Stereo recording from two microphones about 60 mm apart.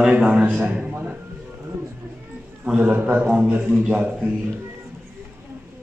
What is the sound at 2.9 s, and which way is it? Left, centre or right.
Speech, right.